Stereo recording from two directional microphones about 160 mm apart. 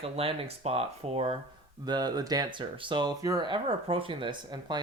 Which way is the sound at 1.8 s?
25° right (ahead or behind).